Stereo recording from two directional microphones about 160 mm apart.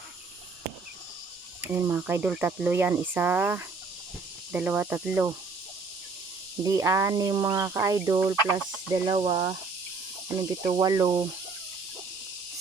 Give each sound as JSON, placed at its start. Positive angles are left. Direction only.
{"t": 1.6, "sound": "speech", "side_deg": -15}
{"t": 6.6, "sound": "speech", "side_deg": -20}
{"t": 10.2, "sound": "speech", "side_deg": -20}